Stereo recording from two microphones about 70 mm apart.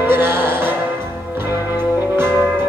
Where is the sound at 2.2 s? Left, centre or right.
Right.